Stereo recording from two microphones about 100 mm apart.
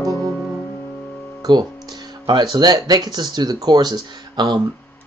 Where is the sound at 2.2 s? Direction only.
45° right (ahead or behind).